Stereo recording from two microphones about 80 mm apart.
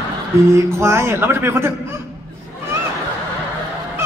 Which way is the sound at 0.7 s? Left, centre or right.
Right.